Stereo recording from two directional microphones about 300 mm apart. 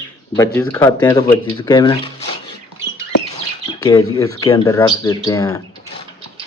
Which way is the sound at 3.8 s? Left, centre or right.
Centre.